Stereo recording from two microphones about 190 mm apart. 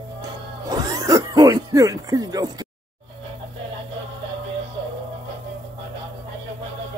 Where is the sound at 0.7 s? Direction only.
20° right (ahead or behind).